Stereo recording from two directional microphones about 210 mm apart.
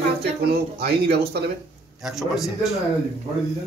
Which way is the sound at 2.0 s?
Centre (ahead or behind).